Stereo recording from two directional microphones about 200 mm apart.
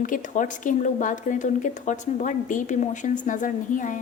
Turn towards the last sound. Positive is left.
turn(degrees=40)  # may be behind; listen again after turning